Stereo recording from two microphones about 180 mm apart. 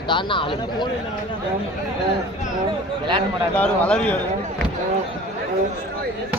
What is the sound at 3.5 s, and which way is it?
Speech, 5° left (ahead or behind).